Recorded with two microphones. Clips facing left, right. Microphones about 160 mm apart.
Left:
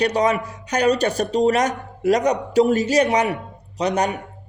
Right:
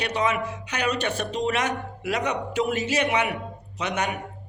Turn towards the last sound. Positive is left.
turn(degrees=35)  # may be behind; listen again after turning